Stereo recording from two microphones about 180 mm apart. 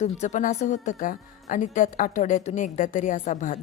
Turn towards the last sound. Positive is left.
turn(degrees=45)  # may be behind; listen again after turning